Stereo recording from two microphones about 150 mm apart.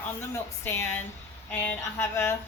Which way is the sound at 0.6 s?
15° left (ahead or behind).